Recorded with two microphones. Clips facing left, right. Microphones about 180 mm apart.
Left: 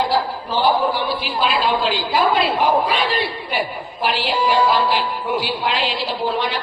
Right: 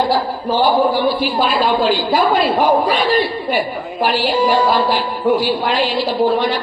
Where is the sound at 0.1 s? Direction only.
40° right (ahead or behind).